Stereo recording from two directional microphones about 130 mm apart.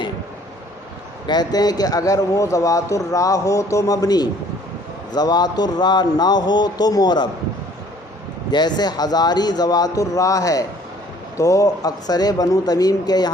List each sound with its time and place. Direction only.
1.3 s speech: 30° left (ahead or behind)
8.4 s speech: 35° left (ahead or behind)